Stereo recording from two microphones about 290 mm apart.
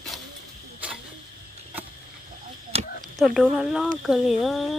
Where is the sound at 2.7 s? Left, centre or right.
Right.